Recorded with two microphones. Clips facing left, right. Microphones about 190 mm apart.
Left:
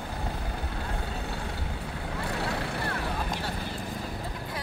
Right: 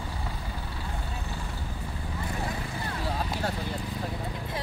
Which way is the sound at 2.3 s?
70° left (ahead or behind).